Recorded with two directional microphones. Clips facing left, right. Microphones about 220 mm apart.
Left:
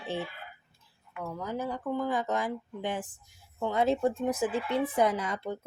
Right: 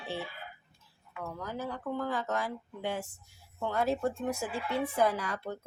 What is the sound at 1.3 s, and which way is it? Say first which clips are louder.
Speech: left 4 dB; 15° left (ahead or behind).